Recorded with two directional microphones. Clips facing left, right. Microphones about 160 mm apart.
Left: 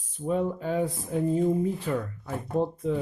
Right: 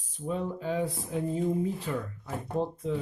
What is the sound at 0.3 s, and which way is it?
Speech, 50° left (ahead or behind).